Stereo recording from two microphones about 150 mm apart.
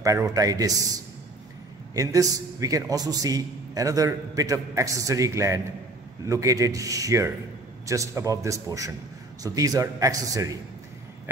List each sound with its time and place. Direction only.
0.0 s a man's voice: 25° right (ahead or behind)